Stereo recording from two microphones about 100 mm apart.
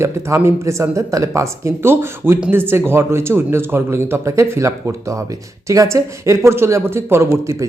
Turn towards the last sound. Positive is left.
turn(degrees=-30)  # may be behind; listen again after turning